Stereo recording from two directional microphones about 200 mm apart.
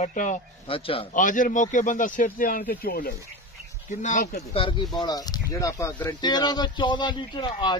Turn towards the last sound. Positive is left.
turn(degrees=25)  # may be behind; listen again after turning